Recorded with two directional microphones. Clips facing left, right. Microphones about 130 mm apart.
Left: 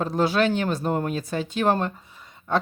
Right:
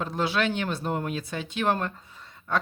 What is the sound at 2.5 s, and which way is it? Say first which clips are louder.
Speech: left 4 dB; 25° left (ahead or behind).